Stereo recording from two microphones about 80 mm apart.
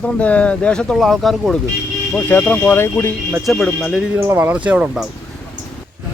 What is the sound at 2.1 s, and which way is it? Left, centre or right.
Speech, left.